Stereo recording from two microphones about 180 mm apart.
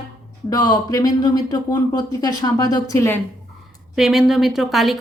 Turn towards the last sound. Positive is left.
turn(degrees=0)  # may be behind; listen again after turning